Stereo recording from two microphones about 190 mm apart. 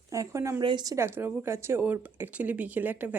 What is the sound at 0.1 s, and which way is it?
Speech, 15° right (ahead or behind).